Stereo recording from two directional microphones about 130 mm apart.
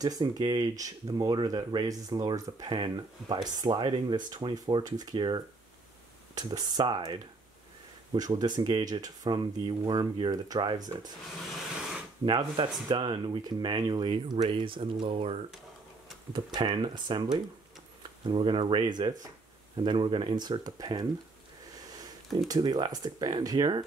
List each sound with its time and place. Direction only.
0.0 s speech: 35° right (ahead or behind)
12.3 s speech: 35° right (ahead or behind)
16.3 s speech: 35° right (ahead or behind)
21.7 s a sound: 30° right (ahead or behind)
22.5 s speech: 30° right (ahead or behind)